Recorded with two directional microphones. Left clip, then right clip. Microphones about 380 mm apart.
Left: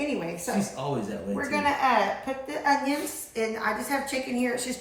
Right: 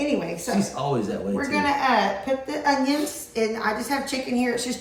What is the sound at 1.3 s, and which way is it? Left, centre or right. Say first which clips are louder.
A woman's voice: right 2 dB; centre.